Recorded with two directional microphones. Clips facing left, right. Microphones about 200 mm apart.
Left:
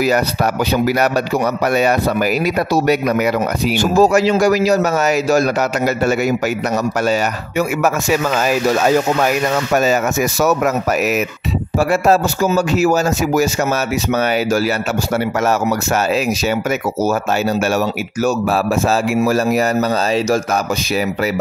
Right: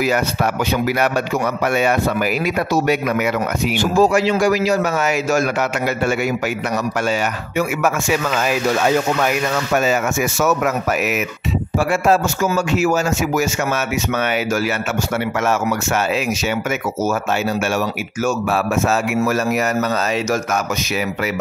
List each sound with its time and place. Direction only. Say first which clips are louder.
0.8 s speech: left 3 dB; 40° left (ahead or behind)
10.4 s speech: left 2 dB; 40° left (ahead or behind)
19.2 s speech: left 3 dB; 35° left (ahead or behind)